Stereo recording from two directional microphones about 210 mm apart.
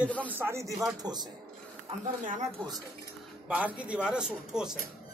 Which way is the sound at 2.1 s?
40° right (ahead or behind).